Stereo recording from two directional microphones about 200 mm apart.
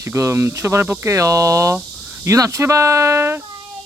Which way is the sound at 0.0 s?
15° right (ahead or behind).